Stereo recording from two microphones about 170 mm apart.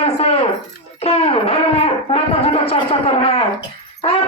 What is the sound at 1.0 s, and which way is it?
Music, 35° left (ahead or behind).